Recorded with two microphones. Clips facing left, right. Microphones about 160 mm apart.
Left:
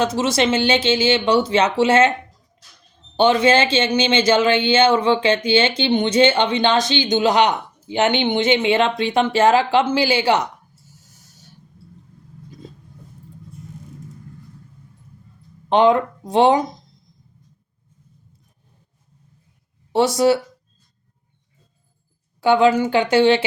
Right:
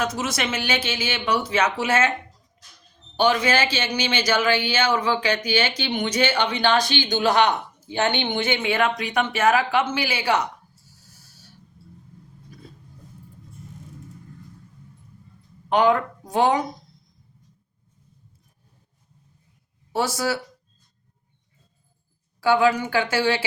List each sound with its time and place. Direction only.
0.0 s speech: 30° left (ahead or behind)
3.2 s speech: 25° left (ahead or behind)
15.7 s speech: 25° left (ahead or behind)
19.9 s speech: 25° left (ahead or behind)
22.4 s speech: 25° left (ahead or behind)